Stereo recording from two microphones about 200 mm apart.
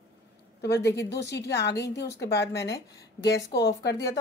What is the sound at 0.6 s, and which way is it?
A woman's voice, 55° left (ahead or behind).